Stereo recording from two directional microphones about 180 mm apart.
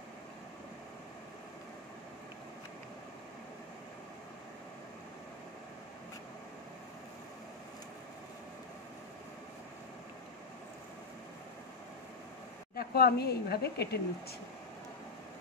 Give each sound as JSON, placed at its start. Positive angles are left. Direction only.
{"t": 12.7, "sound": "speech", "side_deg": 60}